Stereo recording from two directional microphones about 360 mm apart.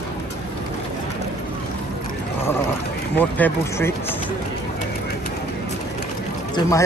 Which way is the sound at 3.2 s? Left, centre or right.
Centre.